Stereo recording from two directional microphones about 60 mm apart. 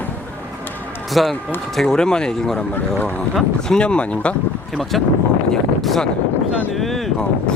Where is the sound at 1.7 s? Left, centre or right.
Centre.